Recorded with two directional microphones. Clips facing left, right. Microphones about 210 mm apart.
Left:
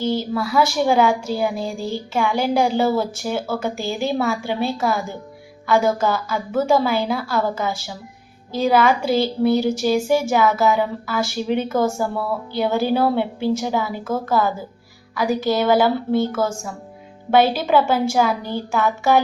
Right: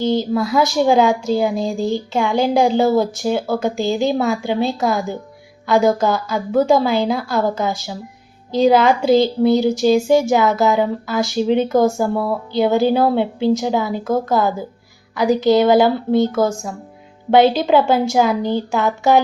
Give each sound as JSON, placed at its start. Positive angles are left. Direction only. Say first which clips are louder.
{"t": 0.0, "sound": "a woman's voice", "louder": "right 4 dB", "side_deg": -20}